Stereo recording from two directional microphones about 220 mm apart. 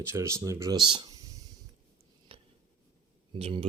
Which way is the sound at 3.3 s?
25° right (ahead or behind).